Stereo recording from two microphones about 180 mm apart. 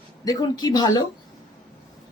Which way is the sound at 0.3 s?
20° left (ahead or behind).